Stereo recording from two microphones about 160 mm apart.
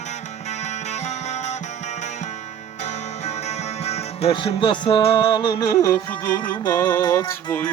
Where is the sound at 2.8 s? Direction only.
45° left (ahead or behind); by 7.5 s 20° left (ahead or behind).